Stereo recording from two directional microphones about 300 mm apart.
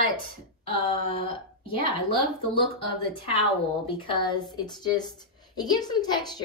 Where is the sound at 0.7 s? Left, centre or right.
Centre.